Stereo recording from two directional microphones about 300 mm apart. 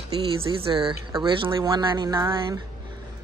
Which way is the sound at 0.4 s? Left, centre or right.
Centre.